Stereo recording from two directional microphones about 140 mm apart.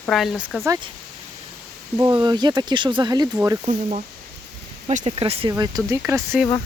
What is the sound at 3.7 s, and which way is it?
Speech, 55° right (ahead or behind).